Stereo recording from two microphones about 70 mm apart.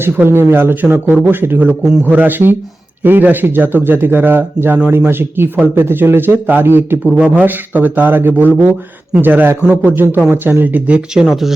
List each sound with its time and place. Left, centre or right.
0.0 s a man's voice: right; by 11.5 s centre